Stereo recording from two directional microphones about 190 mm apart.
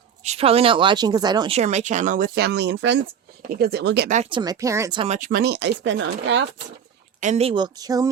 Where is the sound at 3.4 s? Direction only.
55° right (ahead or behind).